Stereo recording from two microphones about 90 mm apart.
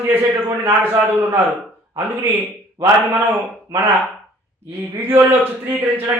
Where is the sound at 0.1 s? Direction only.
25° right (ahead or behind).